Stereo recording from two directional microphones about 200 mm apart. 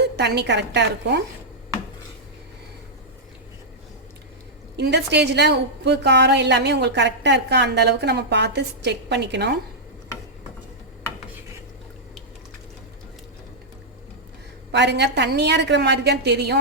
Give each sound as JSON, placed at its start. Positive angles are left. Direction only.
{"t": 0.0, "sound": "a woman's voice", "side_deg": -55}
{"t": 4.8, "sound": "a woman's voice", "side_deg": -55}
{"t": 14.7, "sound": "a woman's voice", "side_deg": -60}